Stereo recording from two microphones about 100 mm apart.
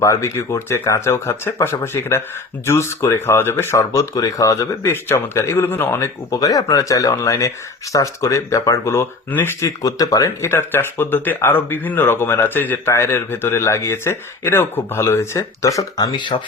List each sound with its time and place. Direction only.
0.0 s speech: 30° left (ahead or behind)
6.0 s speech: 35° left (ahead or behind)
9.6 s speech: 35° left (ahead or behind)
16.3 s speech: 55° left (ahead or behind)